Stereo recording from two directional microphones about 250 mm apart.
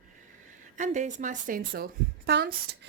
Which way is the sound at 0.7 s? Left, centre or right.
Right.